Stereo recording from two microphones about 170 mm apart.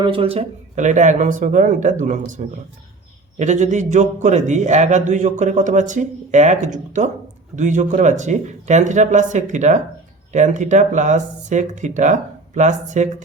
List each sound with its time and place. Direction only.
0.0 s a man's voice: 30° right (ahead or behind)